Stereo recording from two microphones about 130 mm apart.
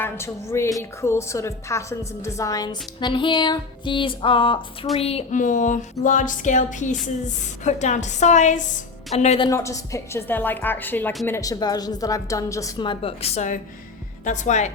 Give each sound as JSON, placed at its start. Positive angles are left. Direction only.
{"t": 0.0, "sound": "a woman's voice", "side_deg": 20}
{"t": 5.3, "sound": "a woman's voice", "side_deg": 75}
{"t": 9.1, "sound": "a woman's voice", "side_deg": 55}
{"t": 9.5, "sound": "a woman's voice", "side_deg": 25}
{"t": 11.3, "sound": "a woman's voice", "side_deg": 25}
{"t": 12.8, "sound": "speech", "side_deg": 45}